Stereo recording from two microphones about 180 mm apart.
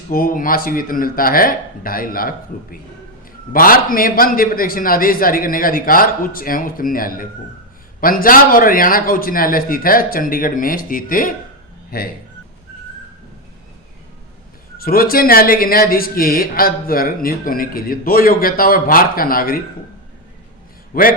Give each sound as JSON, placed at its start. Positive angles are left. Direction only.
{"t": 0.1, "sound": "speech", "side_deg": 50}
{"t": 14.8, "sound": "speech", "side_deg": 55}
{"t": 20.9, "sound": "speech", "side_deg": 50}